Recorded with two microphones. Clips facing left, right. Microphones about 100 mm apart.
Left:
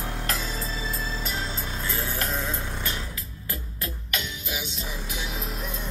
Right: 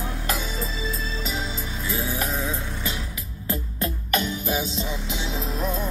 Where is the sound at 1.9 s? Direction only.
10° right (ahead or behind).